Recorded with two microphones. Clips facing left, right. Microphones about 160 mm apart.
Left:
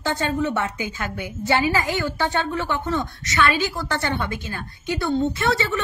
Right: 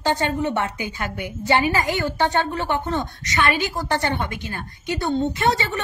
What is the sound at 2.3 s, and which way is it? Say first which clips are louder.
A woman's voice: right 2 dB; 20° right (ahead or behind).